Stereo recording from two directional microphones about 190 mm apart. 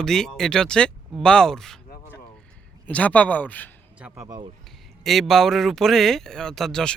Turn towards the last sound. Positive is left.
turn(degrees=0)  # may be behind; listen again after turning